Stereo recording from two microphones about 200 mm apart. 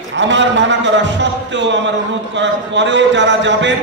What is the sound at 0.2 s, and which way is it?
A man's voice, 65° right (ahead or behind).